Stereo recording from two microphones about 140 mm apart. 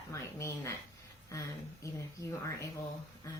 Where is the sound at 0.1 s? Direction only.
20° left (ahead or behind).